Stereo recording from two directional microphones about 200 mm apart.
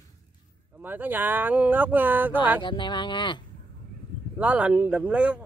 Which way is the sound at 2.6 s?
25° left (ahead or behind).